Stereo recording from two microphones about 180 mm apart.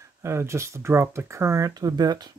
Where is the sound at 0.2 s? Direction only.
15° right (ahead or behind).